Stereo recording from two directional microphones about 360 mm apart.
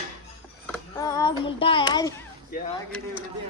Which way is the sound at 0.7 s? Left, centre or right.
Centre.